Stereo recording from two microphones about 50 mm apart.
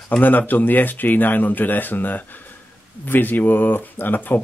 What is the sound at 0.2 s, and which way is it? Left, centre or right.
Speech, left.